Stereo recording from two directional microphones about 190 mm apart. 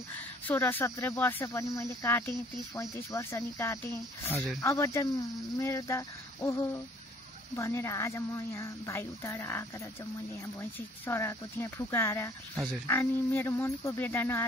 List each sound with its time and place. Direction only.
0.5 s speech: 10° left (ahead or behind)